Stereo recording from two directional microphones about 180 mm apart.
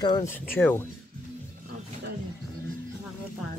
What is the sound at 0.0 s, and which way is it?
Speech, 25° left (ahead or behind).